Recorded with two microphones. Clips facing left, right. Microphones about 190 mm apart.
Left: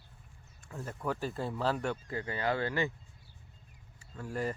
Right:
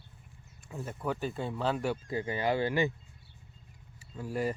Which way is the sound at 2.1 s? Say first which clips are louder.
Right 4 dB; 20° right (ahead or behind).